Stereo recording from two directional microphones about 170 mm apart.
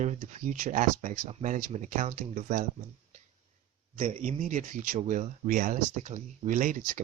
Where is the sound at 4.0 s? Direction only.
45° right (ahead or behind).